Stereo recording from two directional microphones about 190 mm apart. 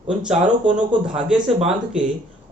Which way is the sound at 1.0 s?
5° right (ahead or behind).